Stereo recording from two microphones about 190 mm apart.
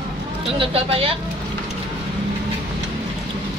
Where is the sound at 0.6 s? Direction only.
30° right (ahead or behind).